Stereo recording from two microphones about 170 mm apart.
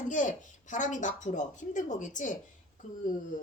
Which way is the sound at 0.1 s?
50° left (ahead or behind).